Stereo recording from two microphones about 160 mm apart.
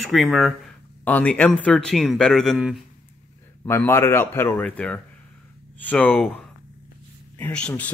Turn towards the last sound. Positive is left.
turn(degrees=10)  # may be behind; listen again after turning